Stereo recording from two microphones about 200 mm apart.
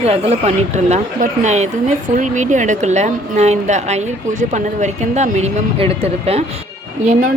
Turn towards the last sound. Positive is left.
turn(degrees=-40)  # may be behind; listen again after turning